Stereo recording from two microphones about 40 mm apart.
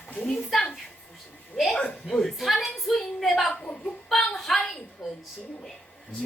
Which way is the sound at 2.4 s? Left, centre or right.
Centre.